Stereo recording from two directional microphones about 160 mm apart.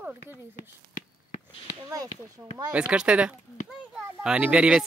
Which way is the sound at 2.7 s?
5° right (ahead or behind).